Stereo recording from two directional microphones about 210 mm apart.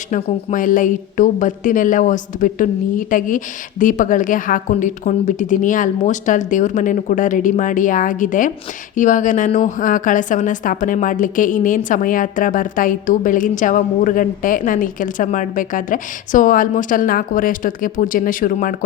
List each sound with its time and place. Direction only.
0.1 s a woman's voice: 40° left (ahead or behind)